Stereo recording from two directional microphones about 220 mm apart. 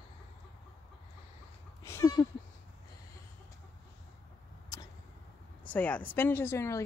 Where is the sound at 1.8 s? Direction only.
15° left (ahead or behind).